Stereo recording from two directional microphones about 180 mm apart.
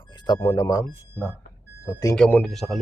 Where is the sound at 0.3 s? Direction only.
15° left (ahead or behind).